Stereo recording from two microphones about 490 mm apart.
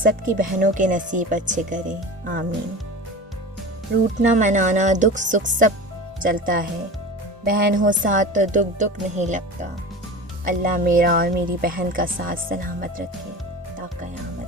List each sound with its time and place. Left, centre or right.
0.0 s speech: centre
4.2 s speech: centre
10.4 s speech: centre